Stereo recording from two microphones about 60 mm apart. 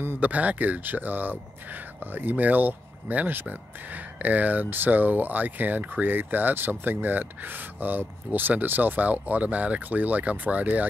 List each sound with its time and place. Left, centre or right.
0.2 s speech: right